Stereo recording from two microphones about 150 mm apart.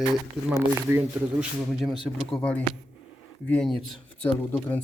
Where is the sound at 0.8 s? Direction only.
15° right (ahead or behind).